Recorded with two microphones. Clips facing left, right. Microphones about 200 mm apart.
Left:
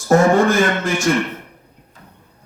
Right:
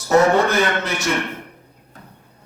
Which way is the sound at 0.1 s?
50° left (ahead or behind).